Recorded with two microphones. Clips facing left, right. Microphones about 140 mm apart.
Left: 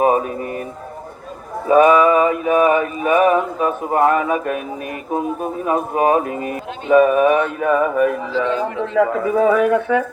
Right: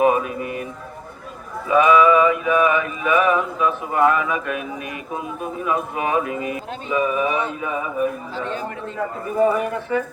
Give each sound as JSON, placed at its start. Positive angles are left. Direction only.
{"t": 0.0, "sound": "music", "side_deg": 40}
{"t": 1.6, "sound": "mantra", "side_deg": 45}
{"t": 5.1, "sound": "speech", "side_deg": 40}
{"t": 8.4, "sound": "speech", "side_deg": 90}